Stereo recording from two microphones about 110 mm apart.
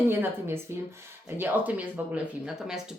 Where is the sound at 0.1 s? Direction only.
20° right (ahead or behind).